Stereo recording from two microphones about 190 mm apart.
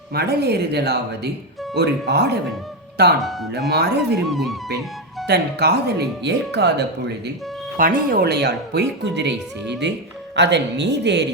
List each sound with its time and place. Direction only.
0.1 s speech: 55° right (ahead or behind)
3.2 s speech: centre (ahead or behind)
3.5 s speech: 60° right (ahead or behind)
4.2 s speech: centre (ahead or behind)
5.2 s speech: 60° right (ahead or behind)
7.8 s speech: 45° right (ahead or behind); by 11.3 s 65° right (ahead or behind)